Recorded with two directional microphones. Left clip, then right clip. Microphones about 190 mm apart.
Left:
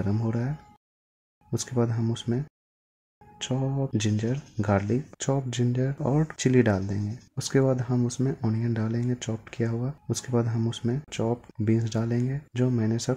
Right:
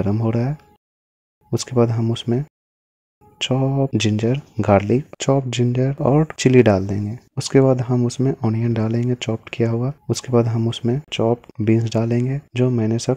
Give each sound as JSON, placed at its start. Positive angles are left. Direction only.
{"t": 0.0, "sound": "speech", "side_deg": -35}